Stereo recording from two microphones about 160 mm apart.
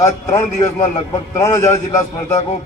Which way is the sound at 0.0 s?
20° left (ahead or behind).